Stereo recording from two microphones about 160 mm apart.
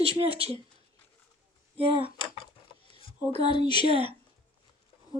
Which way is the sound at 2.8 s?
35° left (ahead or behind).